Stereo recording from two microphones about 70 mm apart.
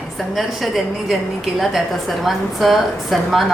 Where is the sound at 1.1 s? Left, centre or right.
Centre.